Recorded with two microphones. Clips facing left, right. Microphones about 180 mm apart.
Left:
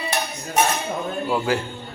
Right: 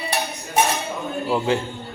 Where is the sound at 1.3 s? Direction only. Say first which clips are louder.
Right 2 dB; 25° right (ahead or behind).